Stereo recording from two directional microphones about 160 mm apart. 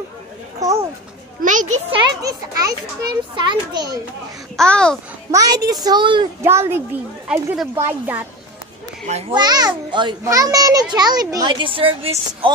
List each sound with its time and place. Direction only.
0.6 s a sound: 20° right (ahead or behind)
1.4 s a child's voice: 55° right (ahead or behind)
2.2 s a child's voice: 20° right (ahead or behind)
4.6 s a child's voice: 5° left (ahead or behind)
5.3 s a child's voice: 20° right (ahead or behind)
6.4 s speech: 15° right (ahead or behind)
9.3 s a child's voice: 25° right (ahead or behind)